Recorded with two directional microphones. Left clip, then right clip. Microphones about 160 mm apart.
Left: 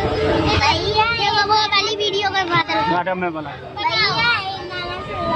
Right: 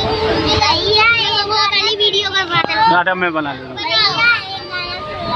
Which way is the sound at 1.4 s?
90° left.